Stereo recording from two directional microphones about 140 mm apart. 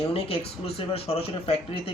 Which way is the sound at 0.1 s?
45° left (ahead or behind).